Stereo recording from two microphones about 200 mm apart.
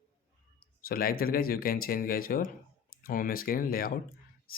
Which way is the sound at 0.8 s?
45° left (ahead or behind).